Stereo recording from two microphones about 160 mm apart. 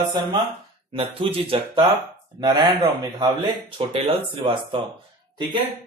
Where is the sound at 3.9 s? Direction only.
35° right (ahead or behind).